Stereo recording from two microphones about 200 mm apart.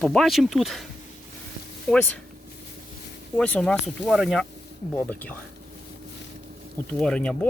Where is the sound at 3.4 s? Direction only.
5° left (ahead or behind).